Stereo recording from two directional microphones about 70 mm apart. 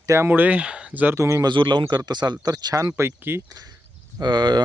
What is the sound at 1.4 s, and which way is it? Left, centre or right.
Speech, right.